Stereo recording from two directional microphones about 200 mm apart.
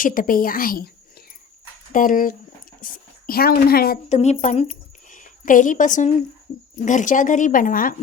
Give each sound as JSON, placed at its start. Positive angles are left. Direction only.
{"t": 0.0, "sound": "a woman's voice", "side_deg": 45}
{"t": 1.9, "sound": "speech", "side_deg": 40}
{"t": 4.2, "sound": "speech", "side_deg": 35}